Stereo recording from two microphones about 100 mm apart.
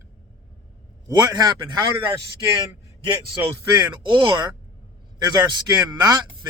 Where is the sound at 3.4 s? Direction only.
50° right (ahead or behind).